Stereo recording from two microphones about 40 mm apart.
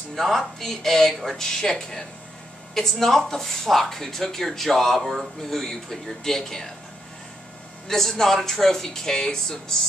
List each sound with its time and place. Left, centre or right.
0.1 s speech: centre
5.4 s speech: centre
7.9 s speech: centre